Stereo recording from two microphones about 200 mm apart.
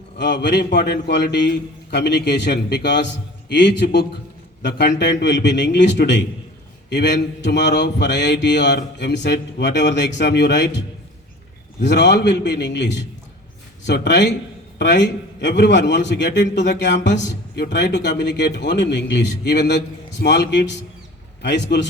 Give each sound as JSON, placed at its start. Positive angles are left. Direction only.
{"t": 0.2, "sound": "a man's voice", "side_deg": 60}